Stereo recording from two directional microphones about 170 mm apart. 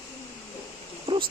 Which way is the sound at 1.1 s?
30° right (ahead or behind).